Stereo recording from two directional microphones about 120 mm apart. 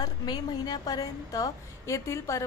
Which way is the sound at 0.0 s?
35° left (ahead or behind).